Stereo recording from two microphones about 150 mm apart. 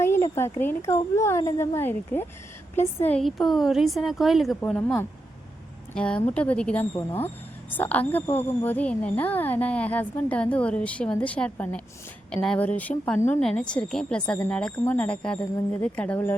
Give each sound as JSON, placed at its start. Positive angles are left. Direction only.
{"t": 0.0, "sound": "a woman's voice", "side_deg": 15}
{"t": 3.2, "sound": "speech", "side_deg": 0}
{"t": 4.6, "sound": "a woman's voice", "side_deg": 10}